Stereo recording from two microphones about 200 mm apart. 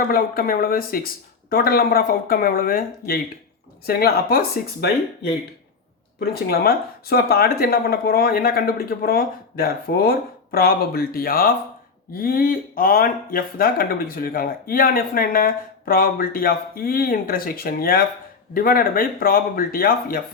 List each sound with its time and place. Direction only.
0.1 s speech: 45° left (ahead or behind)
6.5 s speech: 50° left (ahead or behind)